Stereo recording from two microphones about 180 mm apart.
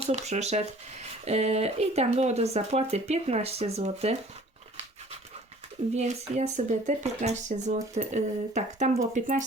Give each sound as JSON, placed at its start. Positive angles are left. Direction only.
{"t": 0.0, "sound": "speech", "side_deg": -35}
{"t": 5.9, "sound": "speech", "side_deg": -40}